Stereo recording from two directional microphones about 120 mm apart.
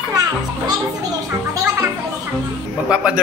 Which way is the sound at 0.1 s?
30° right (ahead or behind).